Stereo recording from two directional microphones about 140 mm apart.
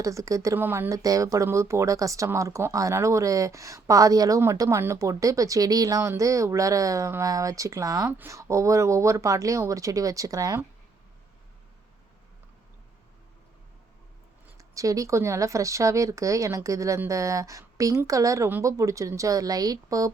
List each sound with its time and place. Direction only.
0.0 s speech: 25° right (ahead or behind)
14.6 s speech: 25° right (ahead or behind)